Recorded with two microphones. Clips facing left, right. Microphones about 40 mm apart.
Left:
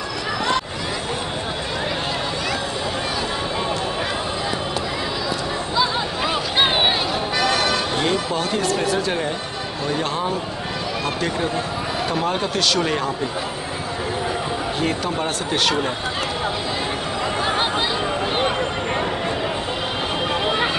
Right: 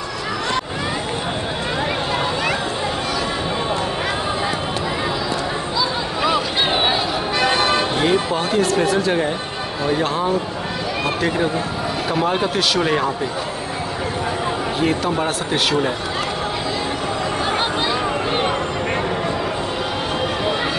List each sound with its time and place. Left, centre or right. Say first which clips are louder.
7.3 s music: right 3 dB; right
8.0 s speech: right 3 dB; centre
8.5 s speech: right 5 dB; centre
12.1 s speech: right 4 dB; centre
14.8 s speech: right 4 dB; centre